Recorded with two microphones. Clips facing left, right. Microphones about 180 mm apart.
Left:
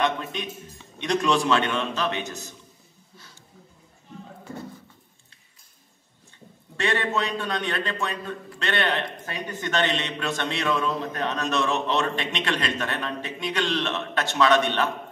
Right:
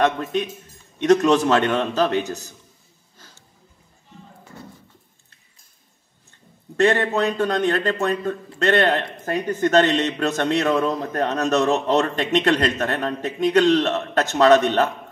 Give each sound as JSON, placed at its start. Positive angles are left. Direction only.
{"t": 0.0, "sound": "a man's voice", "side_deg": -40}
{"t": 6.8, "sound": "a man's voice", "side_deg": -45}